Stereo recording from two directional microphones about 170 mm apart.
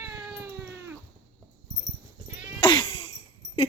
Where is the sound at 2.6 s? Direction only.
30° left (ahead or behind).